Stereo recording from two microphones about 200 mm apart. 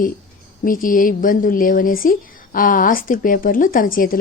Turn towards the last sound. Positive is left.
turn(degrees=45)  # may be behind; listen again after turning